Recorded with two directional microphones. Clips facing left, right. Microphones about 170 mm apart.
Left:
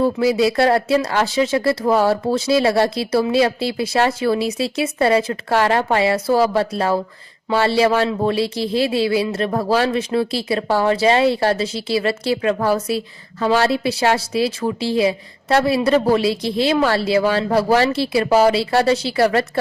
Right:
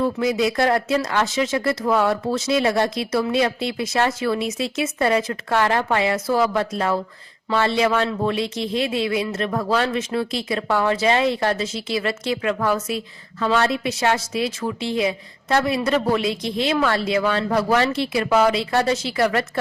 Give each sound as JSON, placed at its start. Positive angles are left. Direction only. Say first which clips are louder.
{"t": 0.0, "sound": "a woman's voice", "louder": "left 4 dB", "side_deg": 30}